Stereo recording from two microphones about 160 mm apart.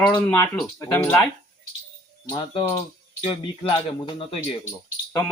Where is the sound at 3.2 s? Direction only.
30° left (ahead or behind).